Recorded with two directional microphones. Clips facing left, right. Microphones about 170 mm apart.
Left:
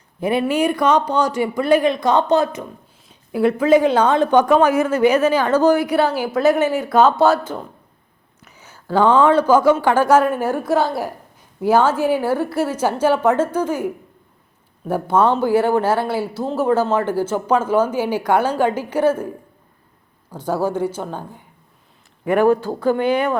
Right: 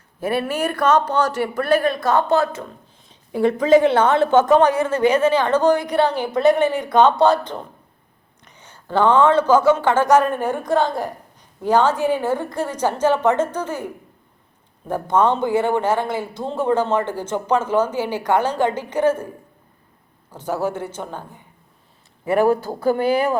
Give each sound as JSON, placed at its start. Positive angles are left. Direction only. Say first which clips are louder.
{"t": 0.2, "sound": "speech", "louder": "left 4 dB", "side_deg": 15}
{"t": 3.1, "sound": "speech", "louder": "left 1 dB", "side_deg": 5}
{"t": 20.3, "sound": "speech", "louder": "left 3 dB", "side_deg": 10}
{"t": 22.4, "sound": "speech", "louder": "left 2 dB", "side_deg": -10}
{"t": 22.9, "sound": "speech", "louder": "even", "side_deg": -35}